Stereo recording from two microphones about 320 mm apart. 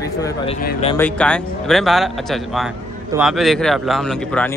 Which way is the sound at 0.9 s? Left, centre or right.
Centre.